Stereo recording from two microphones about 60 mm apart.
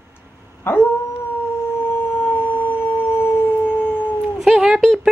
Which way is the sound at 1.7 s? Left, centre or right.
Left.